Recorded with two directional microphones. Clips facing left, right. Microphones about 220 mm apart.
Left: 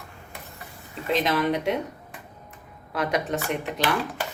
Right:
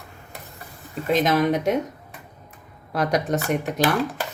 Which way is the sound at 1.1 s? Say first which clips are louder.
Right 4 dB; 45° right (ahead or behind).